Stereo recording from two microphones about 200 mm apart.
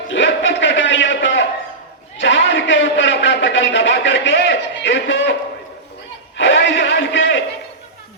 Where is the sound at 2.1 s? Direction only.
65° left (ahead or behind).